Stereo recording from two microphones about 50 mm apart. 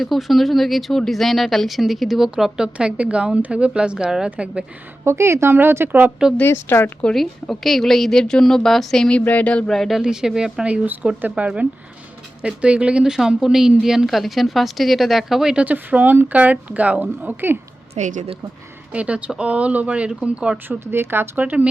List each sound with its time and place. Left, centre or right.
0.0 s a woman's voice: centre
2.7 s speech: right
4.3 s speech: right
5.0 s a woman's voice: right
5.5 s speech: right
6.4 s speech: left
7.1 s a woman's voice: centre
9.2 s a sound: left
9.6 s speech: centre
10.0 s speech: centre
11.2 s a woman's voice: right; by 15.5 s centre
15.6 s a woman's voice: right
18.9 s speech: right
20.8 s speech: right